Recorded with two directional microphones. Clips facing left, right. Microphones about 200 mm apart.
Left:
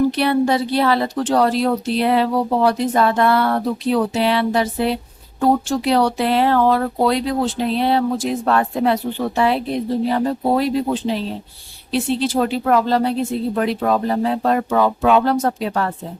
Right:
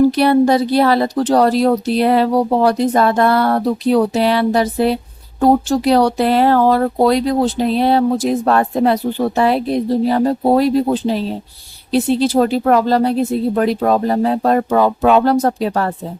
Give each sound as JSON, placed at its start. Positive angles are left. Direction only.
{"t": 0.2, "sound": "a woman's voice", "side_deg": -40}